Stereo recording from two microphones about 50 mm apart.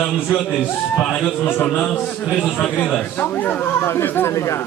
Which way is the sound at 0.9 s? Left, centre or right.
Left.